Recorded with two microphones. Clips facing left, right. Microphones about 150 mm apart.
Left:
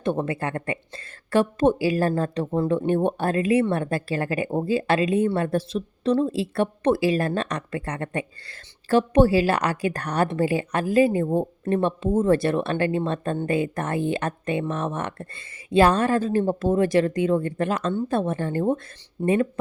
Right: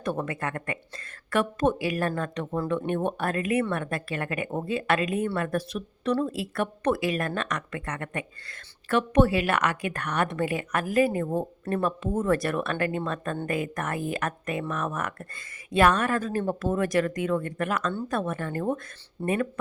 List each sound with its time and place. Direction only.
0.0 s a woman's voice: 25° left (ahead or behind)